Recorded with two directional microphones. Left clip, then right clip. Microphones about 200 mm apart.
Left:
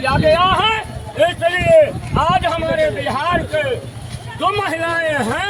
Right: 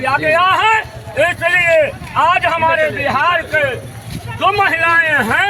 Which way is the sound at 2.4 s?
Centre (ahead or behind).